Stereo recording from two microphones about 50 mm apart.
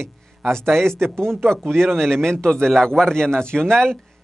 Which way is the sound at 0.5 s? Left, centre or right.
Centre.